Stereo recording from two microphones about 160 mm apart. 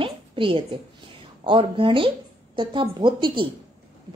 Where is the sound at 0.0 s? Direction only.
35° right (ahead or behind).